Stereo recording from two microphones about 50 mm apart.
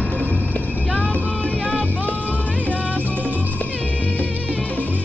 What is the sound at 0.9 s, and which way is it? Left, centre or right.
Vehicle, left.